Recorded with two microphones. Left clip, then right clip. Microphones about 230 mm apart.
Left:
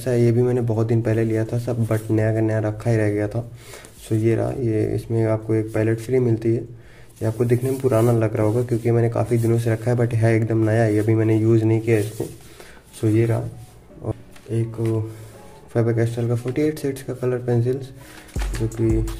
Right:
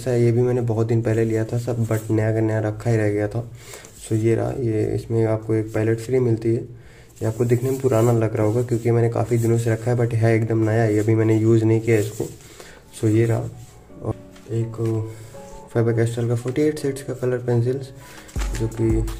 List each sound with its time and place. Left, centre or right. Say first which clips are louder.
0.0 s speech: even; centre
14.0 s music: right 1 dB; centre
14.5 s speech: left 1 dB; left
15.7 s speech: even; centre